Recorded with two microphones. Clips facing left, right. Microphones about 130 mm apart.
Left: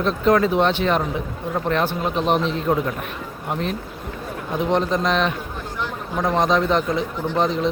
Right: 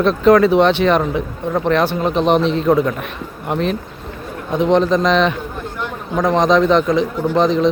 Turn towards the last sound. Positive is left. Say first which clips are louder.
# right 6 dB
turn(degrees=-90)